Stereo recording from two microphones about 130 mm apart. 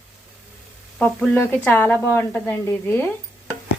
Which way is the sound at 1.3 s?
15° left (ahead or behind).